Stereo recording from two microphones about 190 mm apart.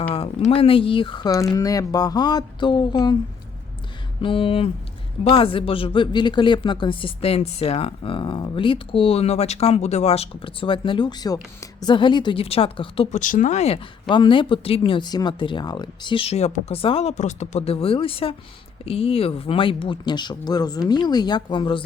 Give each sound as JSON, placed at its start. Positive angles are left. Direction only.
{"t": 0.1, "sound": "a woman's voice", "side_deg": 30}
{"t": 4.2, "sound": "a woman's voice", "side_deg": 30}